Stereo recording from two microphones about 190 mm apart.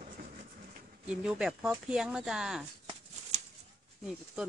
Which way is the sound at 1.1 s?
5° right (ahead or behind).